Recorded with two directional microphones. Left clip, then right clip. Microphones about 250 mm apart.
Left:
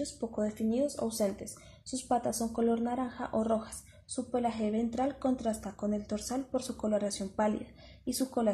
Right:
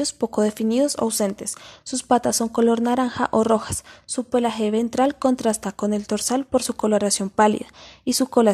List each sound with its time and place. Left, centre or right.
0.2 s speech: right